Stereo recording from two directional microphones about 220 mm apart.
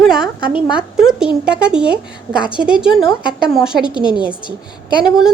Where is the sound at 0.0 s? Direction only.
Centre (ahead or behind).